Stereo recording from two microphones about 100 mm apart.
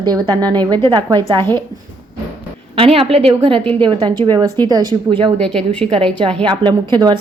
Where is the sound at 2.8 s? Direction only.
75° right (ahead or behind).